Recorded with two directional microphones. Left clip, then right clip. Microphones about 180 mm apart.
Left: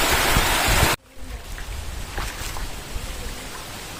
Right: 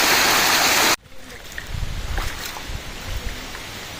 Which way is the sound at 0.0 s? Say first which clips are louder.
Right 3 dB; 35° right (ahead or behind).